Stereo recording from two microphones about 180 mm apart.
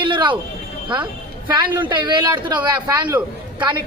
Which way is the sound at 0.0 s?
25° right (ahead or behind).